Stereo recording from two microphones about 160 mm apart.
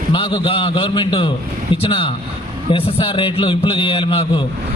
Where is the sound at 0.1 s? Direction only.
30° left (ahead or behind).